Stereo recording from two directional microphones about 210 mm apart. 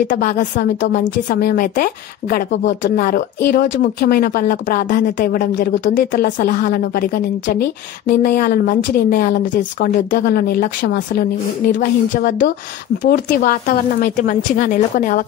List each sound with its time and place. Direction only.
0.1 s a woman's voice: 35° left (ahead or behind)
1.1 s a woman's voice: 50° left (ahead or behind)
2.5 s speech: 60° left (ahead or behind)
3.0 s a woman's voice: 45° left (ahead or behind)